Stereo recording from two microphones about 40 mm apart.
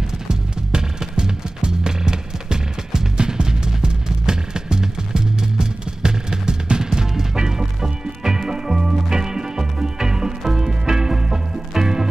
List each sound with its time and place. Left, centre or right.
0.3 s music: centre